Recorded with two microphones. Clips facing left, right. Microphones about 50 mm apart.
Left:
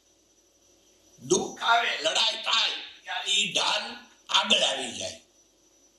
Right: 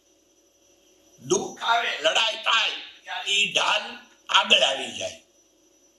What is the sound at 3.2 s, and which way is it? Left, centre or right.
A man's voice, right.